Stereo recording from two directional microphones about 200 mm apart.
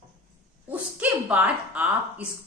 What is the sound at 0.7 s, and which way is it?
A woman's voice, 10° right (ahead or behind).